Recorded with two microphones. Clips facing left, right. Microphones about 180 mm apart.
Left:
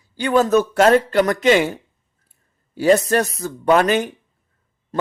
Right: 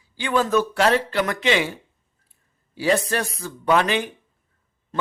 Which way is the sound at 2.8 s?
45° left (ahead or behind).